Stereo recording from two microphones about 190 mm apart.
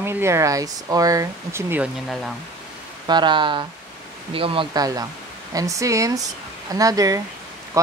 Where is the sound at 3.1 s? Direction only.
25° right (ahead or behind).